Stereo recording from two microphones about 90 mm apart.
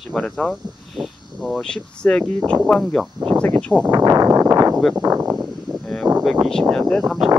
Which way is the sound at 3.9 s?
40° right (ahead or behind).